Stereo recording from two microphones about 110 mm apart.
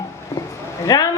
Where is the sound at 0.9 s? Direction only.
35° left (ahead or behind).